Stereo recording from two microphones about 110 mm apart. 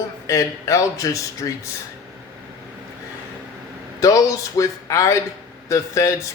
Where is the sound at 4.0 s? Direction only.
30° left (ahead or behind).